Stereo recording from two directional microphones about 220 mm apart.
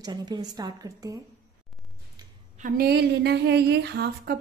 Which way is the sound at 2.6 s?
45° right (ahead or behind).